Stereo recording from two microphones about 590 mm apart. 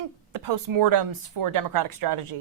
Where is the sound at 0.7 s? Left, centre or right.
Right.